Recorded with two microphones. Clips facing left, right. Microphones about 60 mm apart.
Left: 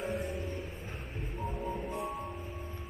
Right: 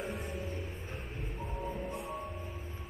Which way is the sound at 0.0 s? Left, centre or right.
Centre.